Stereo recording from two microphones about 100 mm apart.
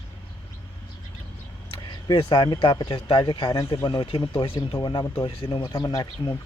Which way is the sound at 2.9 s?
55° left (ahead or behind).